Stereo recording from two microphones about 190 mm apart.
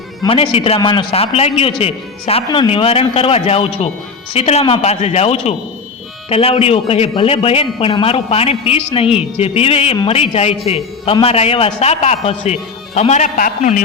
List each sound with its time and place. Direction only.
0.2 s a man's voice: 30° left (ahead or behind)